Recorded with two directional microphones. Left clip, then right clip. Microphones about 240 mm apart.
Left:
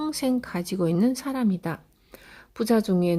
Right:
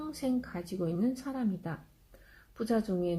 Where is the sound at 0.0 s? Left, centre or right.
Left.